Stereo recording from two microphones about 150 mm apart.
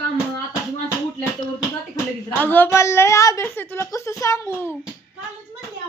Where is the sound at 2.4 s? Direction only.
10° left (ahead or behind).